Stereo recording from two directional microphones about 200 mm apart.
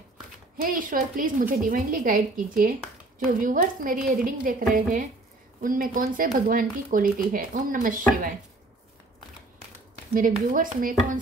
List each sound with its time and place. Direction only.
0.6 s speech: 45° right (ahead or behind)
10.1 s speech: 45° right (ahead or behind)